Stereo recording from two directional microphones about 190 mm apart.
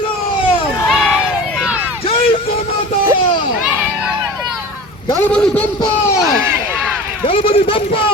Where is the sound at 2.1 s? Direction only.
30° left (ahead or behind).